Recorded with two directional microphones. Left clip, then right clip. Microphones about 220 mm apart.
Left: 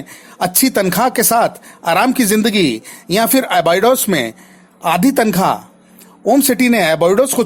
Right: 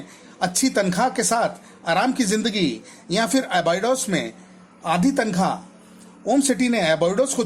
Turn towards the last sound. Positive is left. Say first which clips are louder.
# left 8 dB
turn(degrees=35)  # may be behind; listen again after turning